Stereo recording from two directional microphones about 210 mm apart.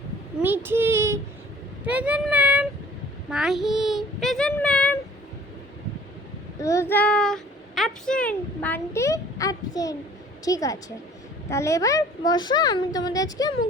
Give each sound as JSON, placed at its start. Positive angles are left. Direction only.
{"t": 0.4, "sound": "a sound", "side_deg": -10}
{"t": 1.8, "sound": "child singing", "side_deg": -5}
{"t": 6.6, "sound": "a child's voice", "side_deg": 15}